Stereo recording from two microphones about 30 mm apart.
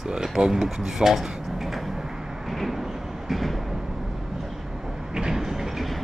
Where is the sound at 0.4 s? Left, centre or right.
Centre.